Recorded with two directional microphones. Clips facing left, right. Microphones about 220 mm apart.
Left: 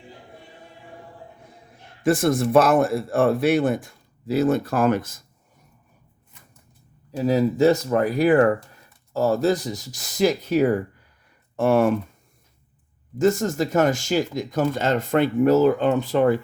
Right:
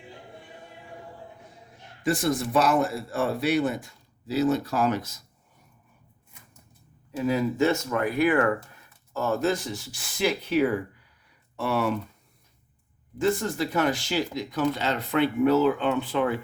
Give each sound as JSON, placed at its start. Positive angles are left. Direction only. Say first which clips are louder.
{"t": 2.0, "sound": "speech", "louder": "left 6 dB", "side_deg": 50}
{"t": 7.2, "sound": "speech", "louder": "left 5 dB", "side_deg": 35}
{"t": 13.1, "sound": "speech", "louder": "left 5 dB", "side_deg": 45}